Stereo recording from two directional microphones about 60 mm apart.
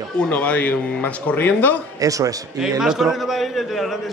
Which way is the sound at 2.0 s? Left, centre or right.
Right.